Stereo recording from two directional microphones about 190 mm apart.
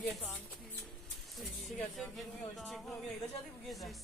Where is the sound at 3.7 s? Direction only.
Centre (ahead or behind).